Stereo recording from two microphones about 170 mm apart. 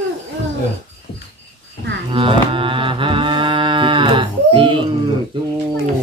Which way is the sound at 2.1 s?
30° right (ahead or behind).